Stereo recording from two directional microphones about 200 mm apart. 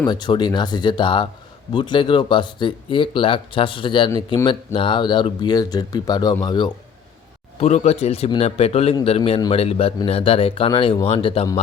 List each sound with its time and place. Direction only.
0.0 s speech: 20° left (ahead or behind)
7.6 s a man's voice: 35° left (ahead or behind)